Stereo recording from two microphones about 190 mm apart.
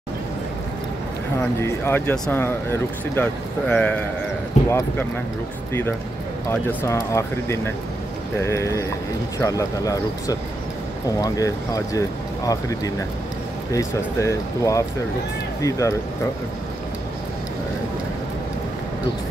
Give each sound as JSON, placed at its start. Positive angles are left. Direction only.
{"t": 1.6, "sound": "speech", "side_deg": 15}